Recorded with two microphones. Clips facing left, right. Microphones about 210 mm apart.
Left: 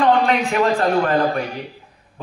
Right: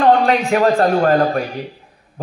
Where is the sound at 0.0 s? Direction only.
40° right (ahead or behind).